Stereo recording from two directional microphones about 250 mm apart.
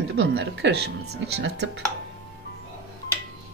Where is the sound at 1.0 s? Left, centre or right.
Right.